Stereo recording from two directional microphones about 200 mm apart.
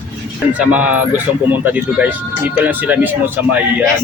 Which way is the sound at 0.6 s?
5° right (ahead or behind).